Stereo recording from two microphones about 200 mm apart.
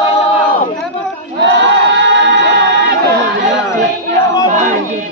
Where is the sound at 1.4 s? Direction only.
60° right (ahead or behind).